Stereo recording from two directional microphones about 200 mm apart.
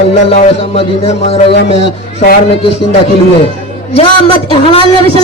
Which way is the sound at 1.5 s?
60° left (ahead or behind).